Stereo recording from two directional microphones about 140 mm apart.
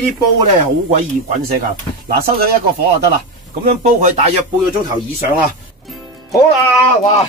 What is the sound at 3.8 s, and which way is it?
Speech, 60° right (ahead or behind).